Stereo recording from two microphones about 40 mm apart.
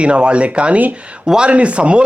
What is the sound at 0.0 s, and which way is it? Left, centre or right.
Speech, right.